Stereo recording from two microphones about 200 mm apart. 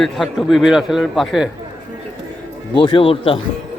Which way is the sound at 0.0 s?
Centre (ahead or behind).